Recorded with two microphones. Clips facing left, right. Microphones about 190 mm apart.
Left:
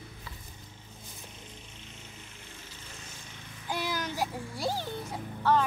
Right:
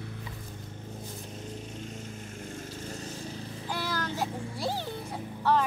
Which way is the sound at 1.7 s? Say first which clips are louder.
Right 10 dB; 45° right (ahead or behind).